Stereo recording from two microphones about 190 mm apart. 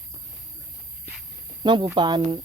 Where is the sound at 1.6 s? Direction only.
25° right (ahead or behind).